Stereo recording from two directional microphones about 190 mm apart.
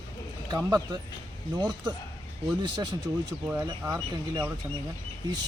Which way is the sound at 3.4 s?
10° right (ahead or behind).